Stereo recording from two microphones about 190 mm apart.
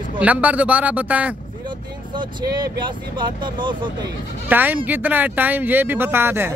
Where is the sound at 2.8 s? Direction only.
25° right (ahead or behind).